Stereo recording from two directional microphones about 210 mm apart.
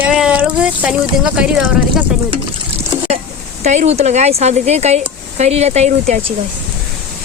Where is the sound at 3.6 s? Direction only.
35° right (ahead or behind).